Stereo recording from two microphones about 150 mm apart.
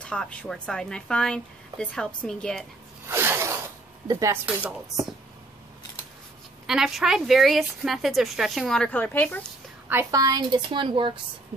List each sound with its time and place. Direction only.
0.0 s a woman's voice: 5° left (ahead or behind)
3.1 s zipper: 15° right (ahead or behind)
4.1 s speech: 20° right (ahead or behind)
6.7 s a woman's voice: centre (ahead or behind)
9.8 s a woman's voice: 20° right (ahead or behind); by 11.1 s 35° right (ahead or behind)